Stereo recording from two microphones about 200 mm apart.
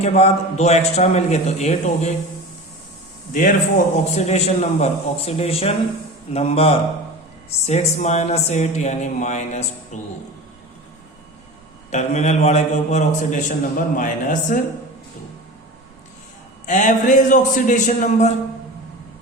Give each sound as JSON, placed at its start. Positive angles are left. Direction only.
{"t": 0.0, "sound": "a man's voice", "side_deg": 30}
{"t": 3.9, "sound": "a man's voice", "side_deg": 35}
{"t": 11.9, "sound": "a man's voice", "side_deg": 35}
{"t": 16.6, "sound": "a man's voice", "side_deg": 40}